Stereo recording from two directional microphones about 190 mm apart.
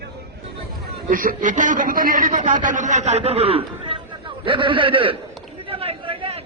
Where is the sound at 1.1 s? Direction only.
45° right (ahead or behind); by 5.2 s 25° right (ahead or behind).